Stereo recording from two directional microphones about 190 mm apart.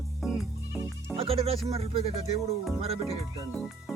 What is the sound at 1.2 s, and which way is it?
Speech, 30° right (ahead or behind).